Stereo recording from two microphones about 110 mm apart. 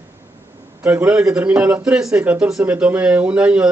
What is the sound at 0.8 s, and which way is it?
Speech, 15° right (ahead or behind).